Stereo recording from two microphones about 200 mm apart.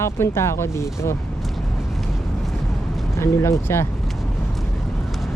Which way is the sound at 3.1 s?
15° left (ahead or behind).